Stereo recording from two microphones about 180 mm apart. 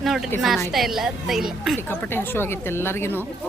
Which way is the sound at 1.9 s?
10° left (ahead or behind).